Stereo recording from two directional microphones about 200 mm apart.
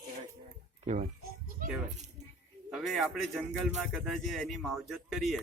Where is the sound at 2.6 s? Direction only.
Centre (ahead or behind).